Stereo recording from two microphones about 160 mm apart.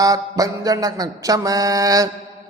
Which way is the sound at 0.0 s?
20° right (ahead or behind).